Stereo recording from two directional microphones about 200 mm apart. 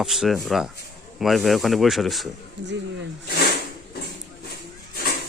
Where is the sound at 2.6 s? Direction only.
60° right (ahead or behind).